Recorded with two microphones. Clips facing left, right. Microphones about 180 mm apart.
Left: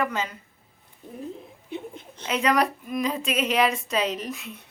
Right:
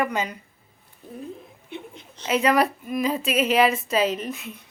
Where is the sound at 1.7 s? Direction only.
50° left (ahead or behind).